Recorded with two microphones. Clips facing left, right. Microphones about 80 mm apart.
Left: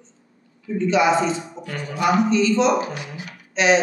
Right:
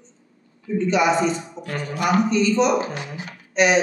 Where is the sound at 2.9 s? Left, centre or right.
Right.